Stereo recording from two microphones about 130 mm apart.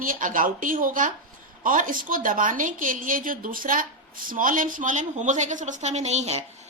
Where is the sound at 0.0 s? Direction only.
90° right.